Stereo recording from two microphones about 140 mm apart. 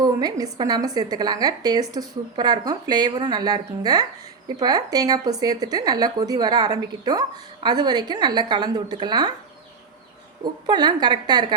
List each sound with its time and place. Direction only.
0.0 s speech: 25° right (ahead or behind)
10.7 s a woman's voice: 30° right (ahead or behind)